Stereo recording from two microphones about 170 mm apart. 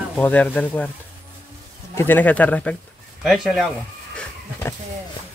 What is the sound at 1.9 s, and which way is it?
Speech, 15° left (ahead or behind).